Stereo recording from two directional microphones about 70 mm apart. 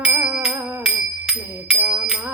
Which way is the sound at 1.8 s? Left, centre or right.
Centre.